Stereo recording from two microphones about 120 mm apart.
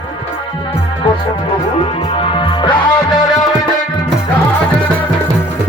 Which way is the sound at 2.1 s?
45° left (ahead or behind).